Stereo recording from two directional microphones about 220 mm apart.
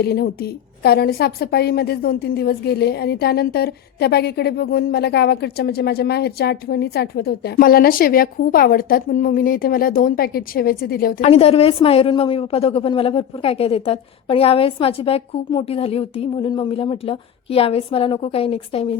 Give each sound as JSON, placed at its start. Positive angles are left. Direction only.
{"t": 0.0, "sound": "a woman's voice", "side_deg": 45}
{"t": 11.2, "sound": "a woman's voice", "side_deg": 25}